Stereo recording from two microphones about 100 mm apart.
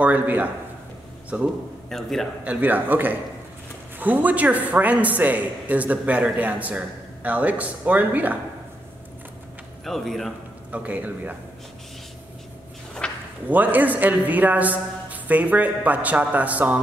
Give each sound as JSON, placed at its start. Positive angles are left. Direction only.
{"t": 0.0, "sound": "a man's voice", "side_deg": -15}
{"t": 1.9, "sound": "a man's voice", "side_deg": 5}
{"t": 2.4, "sound": "a man's voice", "side_deg": -15}
{"t": 9.8, "sound": "a man's voice", "side_deg": 5}
{"t": 10.7, "sound": "a man's voice", "side_deg": -15}
{"t": 13.0, "sound": "a sound", "side_deg": 10}
{"t": 13.5, "sound": "a man's voice", "side_deg": -15}